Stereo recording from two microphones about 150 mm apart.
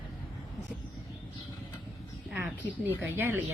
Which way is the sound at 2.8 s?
15° right (ahead or behind).